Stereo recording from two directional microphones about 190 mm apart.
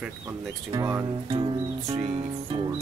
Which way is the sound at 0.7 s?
15° right (ahead or behind).